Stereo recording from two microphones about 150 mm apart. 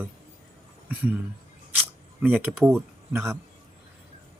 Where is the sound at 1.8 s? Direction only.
10° right (ahead or behind).